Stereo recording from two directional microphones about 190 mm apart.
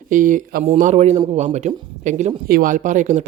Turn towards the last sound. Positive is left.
turn(degrees=-40)  # may be behind; listen again after turning